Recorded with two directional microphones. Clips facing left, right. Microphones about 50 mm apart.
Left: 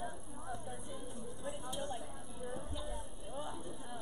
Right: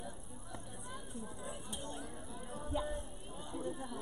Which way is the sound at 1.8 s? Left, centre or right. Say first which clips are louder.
Left 4 dB; left.